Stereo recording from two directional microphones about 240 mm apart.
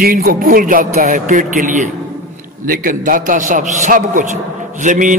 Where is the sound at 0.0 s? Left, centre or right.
Right.